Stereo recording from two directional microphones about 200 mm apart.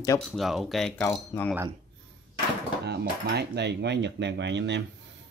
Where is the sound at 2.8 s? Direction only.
55° right (ahead or behind).